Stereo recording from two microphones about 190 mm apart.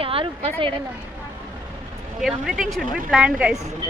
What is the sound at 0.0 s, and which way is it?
Speech, 30° right (ahead or behind).